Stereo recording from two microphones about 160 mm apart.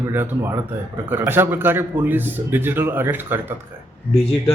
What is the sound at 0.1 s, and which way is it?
A man's voice, 15° right (ahead or behind).